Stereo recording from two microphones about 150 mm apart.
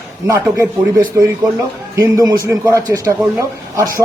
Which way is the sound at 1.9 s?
25° right (ahead or behind).